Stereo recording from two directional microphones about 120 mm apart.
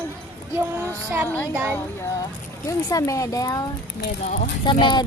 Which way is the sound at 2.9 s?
30° left (ahead or behind).